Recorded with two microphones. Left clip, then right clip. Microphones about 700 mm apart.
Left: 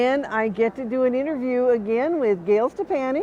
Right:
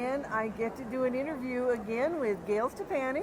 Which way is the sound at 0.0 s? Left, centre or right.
Left.